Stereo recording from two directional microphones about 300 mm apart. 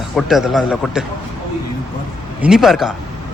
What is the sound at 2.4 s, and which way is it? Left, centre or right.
Speech, centre.